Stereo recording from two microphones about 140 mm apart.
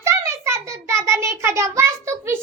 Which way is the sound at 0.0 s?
20° right (ahead or behind).